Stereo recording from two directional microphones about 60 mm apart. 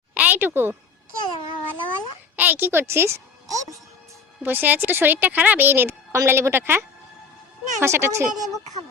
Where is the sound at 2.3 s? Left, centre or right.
Right.